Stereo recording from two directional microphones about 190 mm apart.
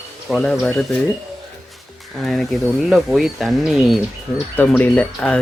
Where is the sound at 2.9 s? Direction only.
Centre (ahead or behind).